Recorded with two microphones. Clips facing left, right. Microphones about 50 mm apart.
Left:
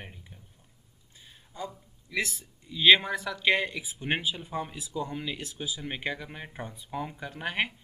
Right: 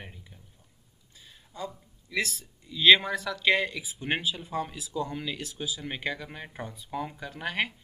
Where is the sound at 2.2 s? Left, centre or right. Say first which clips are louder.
Right 1 dB; centre.